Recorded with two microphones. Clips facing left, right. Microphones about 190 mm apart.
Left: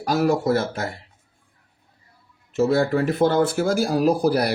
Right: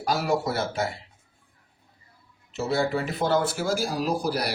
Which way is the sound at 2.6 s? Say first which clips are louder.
Left 5 dB; 55° left (ahead or behind).